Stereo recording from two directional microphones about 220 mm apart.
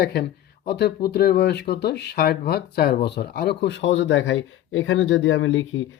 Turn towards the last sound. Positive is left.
turn(degrees=60)  # may be behind; listen again after turning